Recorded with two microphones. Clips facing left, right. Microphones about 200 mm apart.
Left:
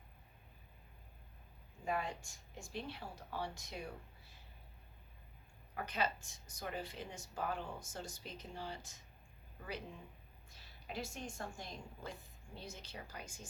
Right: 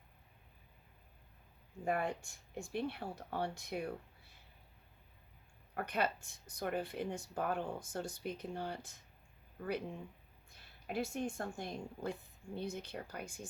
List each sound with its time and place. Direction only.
1.8 s speech: 55° right (ahead or behind)
5.7 s speech: 55° right (ahead or behind)
10.5 s speech: 55° right (ahead or behind)